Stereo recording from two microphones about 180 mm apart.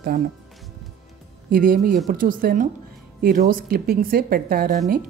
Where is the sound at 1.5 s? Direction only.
50° right (ahead or behind).